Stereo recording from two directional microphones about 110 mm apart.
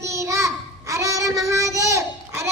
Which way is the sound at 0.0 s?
25° right (ahead or behind).